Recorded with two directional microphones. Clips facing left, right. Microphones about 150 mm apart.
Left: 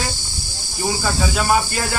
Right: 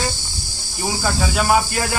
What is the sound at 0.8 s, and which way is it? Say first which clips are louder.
Cricket: even; centre (ahead or behind).